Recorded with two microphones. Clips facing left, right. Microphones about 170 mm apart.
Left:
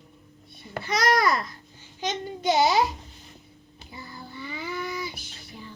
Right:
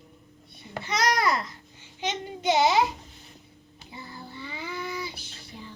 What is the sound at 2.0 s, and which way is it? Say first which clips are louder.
Child singing: left 2 dB; 25° right (ahead or behind).